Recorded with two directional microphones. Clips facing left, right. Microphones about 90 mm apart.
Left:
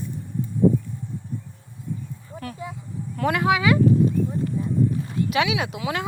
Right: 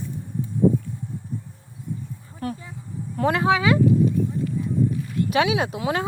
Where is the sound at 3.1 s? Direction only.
30° right (ahead or behind).